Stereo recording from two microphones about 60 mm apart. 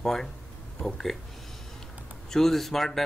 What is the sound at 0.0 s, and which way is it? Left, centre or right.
Speech, centre.